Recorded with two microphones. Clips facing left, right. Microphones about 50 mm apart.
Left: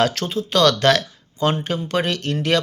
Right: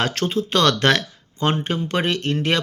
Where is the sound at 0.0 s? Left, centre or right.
Right.